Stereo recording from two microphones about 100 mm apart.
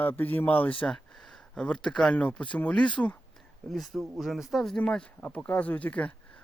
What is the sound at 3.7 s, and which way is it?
Speech, centre (ahead or behind).